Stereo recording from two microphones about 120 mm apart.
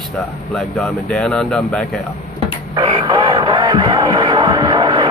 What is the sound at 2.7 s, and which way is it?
Music, 35° right (ahead or behind).